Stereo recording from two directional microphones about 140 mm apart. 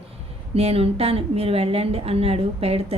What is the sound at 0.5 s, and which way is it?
A woman's voice, 45° right (ahead or behind).